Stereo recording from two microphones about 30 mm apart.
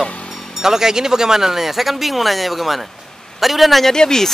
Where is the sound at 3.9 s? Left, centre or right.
Centre.